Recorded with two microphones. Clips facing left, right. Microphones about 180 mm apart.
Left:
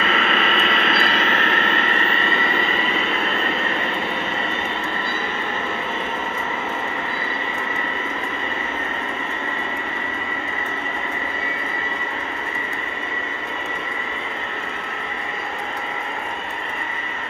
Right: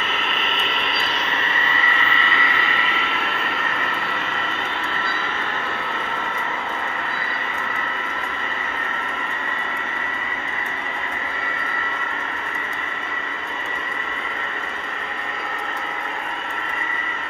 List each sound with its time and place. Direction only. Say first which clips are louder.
0.0 s vehicle: left 6 dB; 90° left; by 2.4 s 55° left (ahead or behind)